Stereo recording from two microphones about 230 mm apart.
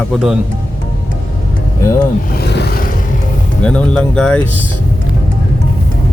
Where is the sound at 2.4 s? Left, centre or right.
Left.